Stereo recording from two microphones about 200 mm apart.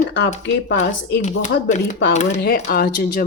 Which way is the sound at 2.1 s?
35° left (ahead or behind).